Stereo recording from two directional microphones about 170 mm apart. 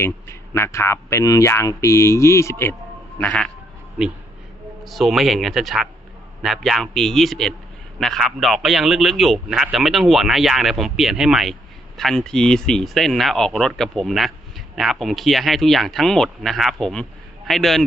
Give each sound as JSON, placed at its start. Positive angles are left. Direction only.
{"t": 0.0, "sound": "speech", "side_deg": 15}
{"t": 4.8, "sound": "a man's voice", "side_deg": 0}